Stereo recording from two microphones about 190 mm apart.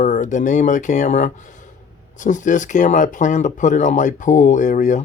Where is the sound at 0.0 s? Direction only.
40° left (ahead or behind).